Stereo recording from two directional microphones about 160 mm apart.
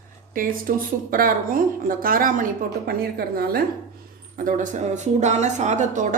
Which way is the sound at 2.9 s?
70° right (ahead or behind).